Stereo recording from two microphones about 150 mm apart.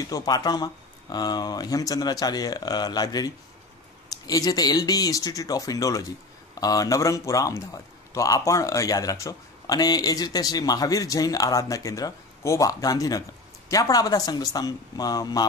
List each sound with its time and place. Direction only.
0.0 s a man's voice: 25° left (ahead or behind)